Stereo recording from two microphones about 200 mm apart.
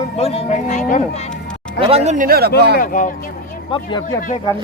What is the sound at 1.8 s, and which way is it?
Speech, 30° right (ahead or behind).